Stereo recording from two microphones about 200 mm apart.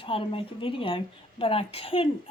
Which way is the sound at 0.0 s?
25° left (ahead or behind).